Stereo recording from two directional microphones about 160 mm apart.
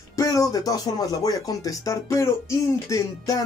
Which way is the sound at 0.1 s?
20° left (ahead or behind).